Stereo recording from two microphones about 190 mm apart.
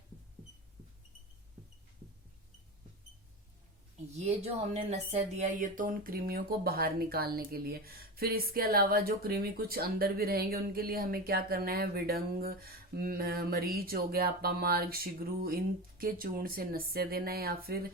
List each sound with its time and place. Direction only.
4.1 s speech: 35° right (ahead or behind); by 17.8 s 50° right (ahead or behind)